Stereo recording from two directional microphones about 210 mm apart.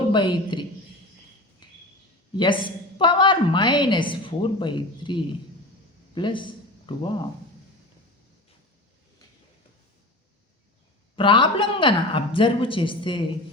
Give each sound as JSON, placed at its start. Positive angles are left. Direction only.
{"t": 0.1, "sound": "a woman's voice", "side_deg": 20}
{"t": 1.6, "sound": "cricket", "side_deg": 20}
{"t": 2.3, "sound": "a woman's voice", "side_deg": 20}
{"t": 11.2, "sound": "a woman's voice", "side_deg": 25}